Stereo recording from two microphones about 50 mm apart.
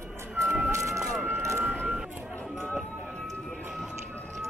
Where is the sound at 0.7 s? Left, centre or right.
Right.